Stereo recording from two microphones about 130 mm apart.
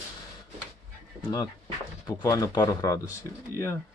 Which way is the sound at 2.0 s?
30° left (ahead or behind).